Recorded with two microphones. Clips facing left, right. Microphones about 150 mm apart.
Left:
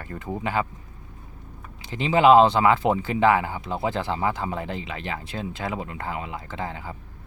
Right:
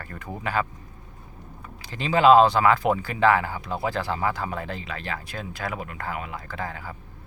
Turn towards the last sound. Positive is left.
turn(degrees=20)  # may be behind; listen again after turning